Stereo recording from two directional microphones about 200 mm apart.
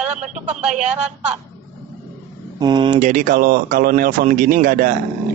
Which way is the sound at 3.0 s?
40° right (ahead or behind).